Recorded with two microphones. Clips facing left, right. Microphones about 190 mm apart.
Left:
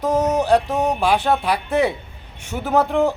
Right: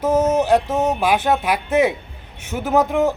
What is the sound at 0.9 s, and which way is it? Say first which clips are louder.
Speech: even; 15° right (ahead or behind).